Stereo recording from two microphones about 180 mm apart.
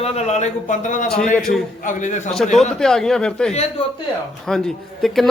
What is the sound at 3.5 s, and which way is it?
Speech, 35° left (ahead or behind).